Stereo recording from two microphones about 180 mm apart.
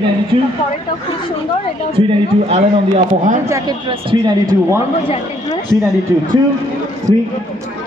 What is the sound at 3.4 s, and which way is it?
Speech, 15° right (ahead or behind).